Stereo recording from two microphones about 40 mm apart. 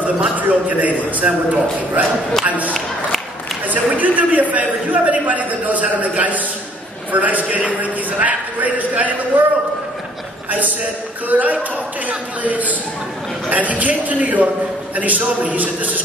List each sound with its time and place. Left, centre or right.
0.0 s a man's voice: right
11.2 s a man's voice: right